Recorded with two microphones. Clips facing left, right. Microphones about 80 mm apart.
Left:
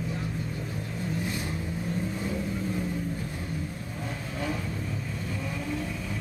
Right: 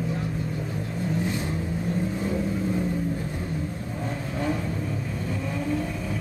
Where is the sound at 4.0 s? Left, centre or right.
Right.